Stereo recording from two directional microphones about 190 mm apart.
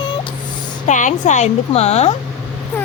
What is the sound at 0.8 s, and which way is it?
Speech, 40° left (ahead or behind).